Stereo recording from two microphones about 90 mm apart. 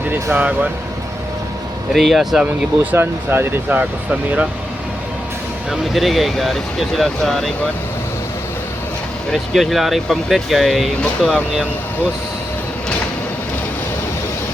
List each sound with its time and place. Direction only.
0.3 s speech: 15° right (ahead or behind)
1.9 s speech: centre (ahead or behind)
2.9 s speech: 25° right (ahead or behind)
5.9 s speech: centre (ahead or behind)
9.3 s speech: centre (ahead or behind)
11.0 s speech: 15° left (ahead or behind)